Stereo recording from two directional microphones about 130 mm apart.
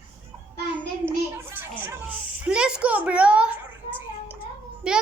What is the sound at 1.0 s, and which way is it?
A child's voice, 15° right (ahead or behind).